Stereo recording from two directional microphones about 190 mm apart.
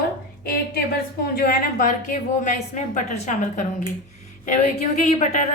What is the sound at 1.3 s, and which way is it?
A woman's voice, 50° left (ahead or behind).